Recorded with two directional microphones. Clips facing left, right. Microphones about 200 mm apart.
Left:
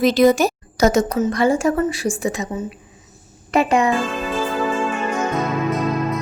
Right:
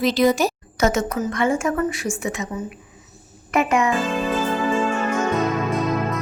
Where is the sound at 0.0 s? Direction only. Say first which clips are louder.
Left 4 dB; 50° left (ahead or behind).